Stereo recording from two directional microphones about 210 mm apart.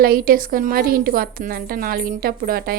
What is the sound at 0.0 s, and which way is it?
A woman's voice, 45° right (ahead or behind).